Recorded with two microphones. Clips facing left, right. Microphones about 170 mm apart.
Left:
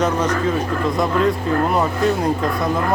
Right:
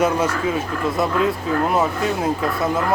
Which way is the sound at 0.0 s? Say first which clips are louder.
Even; 10° right (ahead or behind).